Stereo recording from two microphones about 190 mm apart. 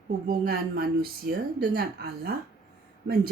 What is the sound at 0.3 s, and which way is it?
A woman's voice, 50° right (ahead or behind).